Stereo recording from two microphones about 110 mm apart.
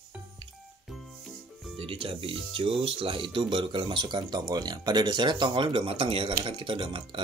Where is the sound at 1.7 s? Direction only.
55° right (ahead or behind).